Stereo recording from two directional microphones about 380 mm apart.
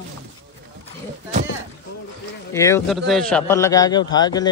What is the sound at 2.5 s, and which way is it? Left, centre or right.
A man's voice, centre.